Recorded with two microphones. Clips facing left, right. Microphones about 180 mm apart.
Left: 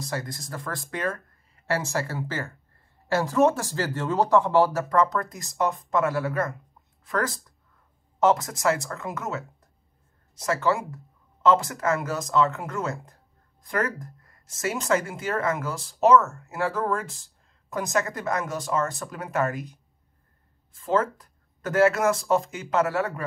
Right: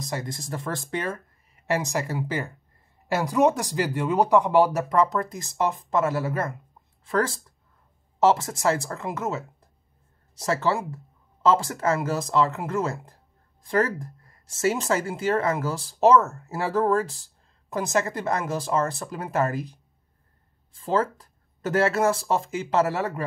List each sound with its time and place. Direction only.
0.0 s speech: 20° right (ahead or behind)
10.4 s speech: 30° right (ahead or behind)
20.8 s speech: 30° right (ahead or behind)